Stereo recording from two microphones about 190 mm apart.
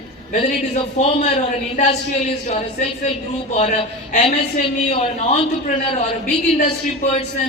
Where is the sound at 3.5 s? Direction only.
35° left (ahead or behind).